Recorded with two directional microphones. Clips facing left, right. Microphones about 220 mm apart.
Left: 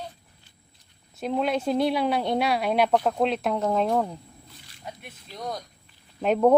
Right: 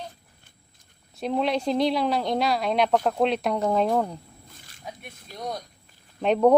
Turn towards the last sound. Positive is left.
turn(degrees=5)  # may be behind; listen again after turning